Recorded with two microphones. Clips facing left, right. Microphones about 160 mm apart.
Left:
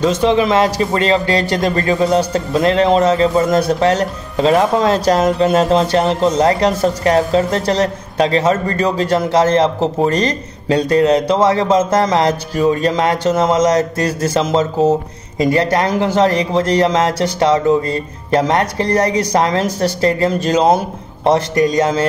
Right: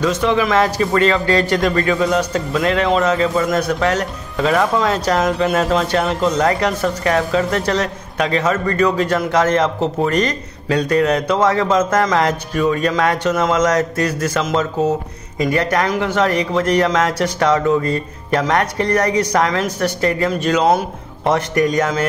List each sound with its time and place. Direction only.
0.0 s a man's voice: 25° left (ahead or behind)